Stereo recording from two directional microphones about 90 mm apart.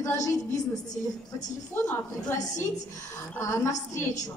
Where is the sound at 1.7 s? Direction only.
25° left (ahead or behind).